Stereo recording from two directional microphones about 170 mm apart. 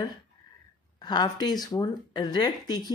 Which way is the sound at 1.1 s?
25° left (ahead or behind).